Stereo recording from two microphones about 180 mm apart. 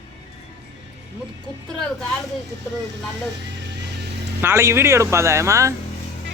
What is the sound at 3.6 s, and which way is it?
Music, 70° right (ahead or behind).